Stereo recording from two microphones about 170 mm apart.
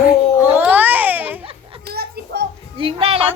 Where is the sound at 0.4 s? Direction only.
10° right (ahead or behind).